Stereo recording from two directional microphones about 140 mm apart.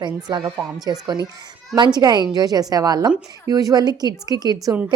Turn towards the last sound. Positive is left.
turn(degrees=-30)  # may be behind; listen again after turning